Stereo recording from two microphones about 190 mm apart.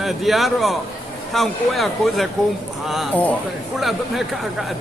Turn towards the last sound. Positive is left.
turn(degrees=0)  # may be behind; listen again after turning